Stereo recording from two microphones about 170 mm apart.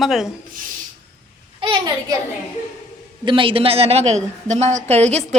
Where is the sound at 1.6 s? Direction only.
30° right (ahead or behind).